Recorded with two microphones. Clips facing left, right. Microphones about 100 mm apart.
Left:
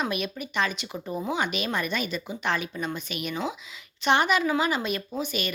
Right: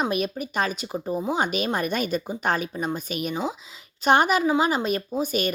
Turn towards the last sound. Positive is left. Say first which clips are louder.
# right 5 dB
turn(degrees=-45)  # may be behind; listen again after turning